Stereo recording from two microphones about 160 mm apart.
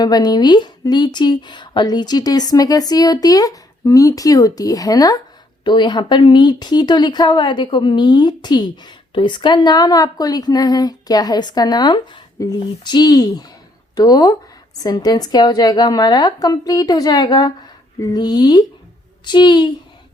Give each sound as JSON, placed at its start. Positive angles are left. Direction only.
{"t": 0.0, "sound": "speech", "side_deg": 25}